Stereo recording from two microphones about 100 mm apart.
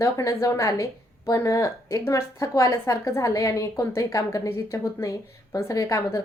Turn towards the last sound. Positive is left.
turn(degrees=30)  # may be behind; listen again after turning